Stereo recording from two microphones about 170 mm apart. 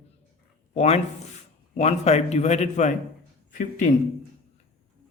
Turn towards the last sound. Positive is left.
turn(degrees=50)  # may be behind; listen again after turning